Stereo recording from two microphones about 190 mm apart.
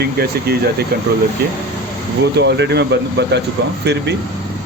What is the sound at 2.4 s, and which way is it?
Speech, 65° right (ahead or behind).